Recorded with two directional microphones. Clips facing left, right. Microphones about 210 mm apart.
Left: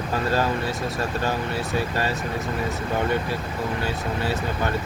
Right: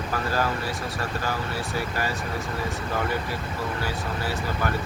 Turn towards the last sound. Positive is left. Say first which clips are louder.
# left 2 dB
turn(degrees=25)  # may be behind; listen again after turning